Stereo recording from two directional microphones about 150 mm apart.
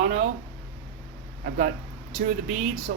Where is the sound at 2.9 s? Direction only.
65° right (ahead or behind).